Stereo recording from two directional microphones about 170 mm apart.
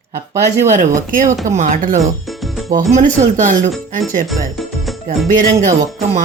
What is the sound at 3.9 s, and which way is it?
Speech, 50° right (ahead or behind).